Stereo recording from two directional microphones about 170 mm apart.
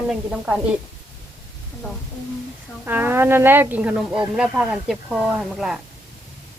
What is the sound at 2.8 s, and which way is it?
A woman's voice, 10° right (ahead or behind).